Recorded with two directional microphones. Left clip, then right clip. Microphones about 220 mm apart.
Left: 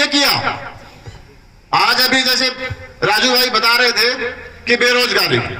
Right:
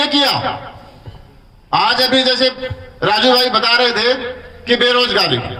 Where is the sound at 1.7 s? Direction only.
50° right (ahead or behind).